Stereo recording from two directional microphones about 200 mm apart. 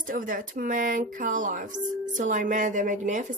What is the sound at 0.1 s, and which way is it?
Speech, 45° right (ahead or behind).